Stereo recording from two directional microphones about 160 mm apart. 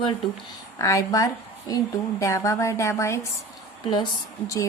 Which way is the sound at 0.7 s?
20° left (ahead or behind).